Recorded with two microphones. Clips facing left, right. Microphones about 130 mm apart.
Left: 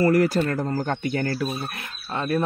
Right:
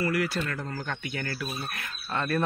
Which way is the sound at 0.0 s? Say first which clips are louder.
Left 9 dB; 40° left (ahead or behind).